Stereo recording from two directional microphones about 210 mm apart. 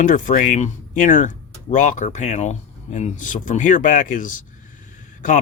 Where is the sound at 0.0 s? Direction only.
40° left (ahead or behind).